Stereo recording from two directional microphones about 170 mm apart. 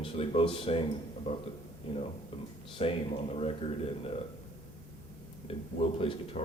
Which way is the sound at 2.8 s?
35° left (ahead or behind).